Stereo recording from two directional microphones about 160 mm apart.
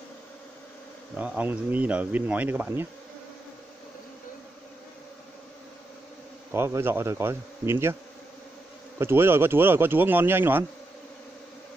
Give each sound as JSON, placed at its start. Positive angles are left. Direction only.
{"t": 1.1, "sound": "speech", "side_deg": -10}
{"t": 6.5, "sound": "speech", "side_deg": -15}
{"t": 8.9, "sound": "speech", "side_deg": -15}